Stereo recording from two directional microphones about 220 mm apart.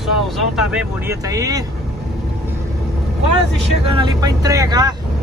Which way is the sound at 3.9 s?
20° right (ahead or behind).